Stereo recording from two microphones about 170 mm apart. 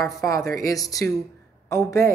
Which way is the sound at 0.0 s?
20° left (ahead or behind).